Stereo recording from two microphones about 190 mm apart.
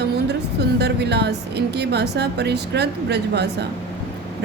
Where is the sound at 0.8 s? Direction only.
60° right (ahead or behind).